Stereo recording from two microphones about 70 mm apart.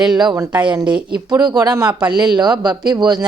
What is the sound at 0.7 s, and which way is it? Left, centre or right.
Speech, centre.